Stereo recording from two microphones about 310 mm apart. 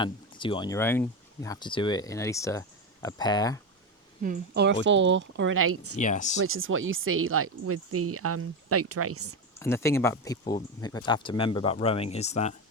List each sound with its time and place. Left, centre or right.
0.0 s speech: centre
4.2 s a woman's voice: right
6.0 s speech: left
6.4 s speech: right
9.6 s speech: centre